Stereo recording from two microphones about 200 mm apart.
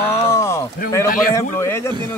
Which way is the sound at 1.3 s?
15° left (ahead or behind).